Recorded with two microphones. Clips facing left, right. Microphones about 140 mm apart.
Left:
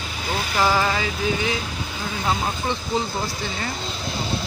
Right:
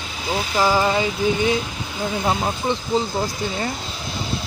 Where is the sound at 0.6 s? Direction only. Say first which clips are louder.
Right 3 dB; 15° right (ahead or behind).